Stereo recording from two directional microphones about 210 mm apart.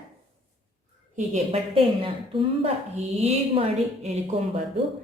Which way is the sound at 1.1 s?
30° right (ahead or behind).